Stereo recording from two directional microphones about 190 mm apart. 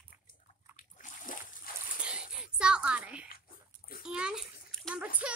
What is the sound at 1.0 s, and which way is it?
Splash, 45° left (ahead or behind).